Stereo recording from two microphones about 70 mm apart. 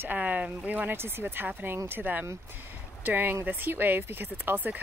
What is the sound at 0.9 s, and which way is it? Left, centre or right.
Speech, right.